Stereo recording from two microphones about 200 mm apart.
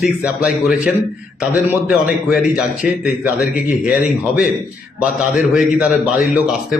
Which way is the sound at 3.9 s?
5° right (ahead or behind).